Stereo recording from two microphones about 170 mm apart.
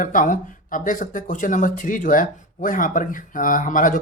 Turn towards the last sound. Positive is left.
turn(degrees=50)  # may be behind; listen again after turning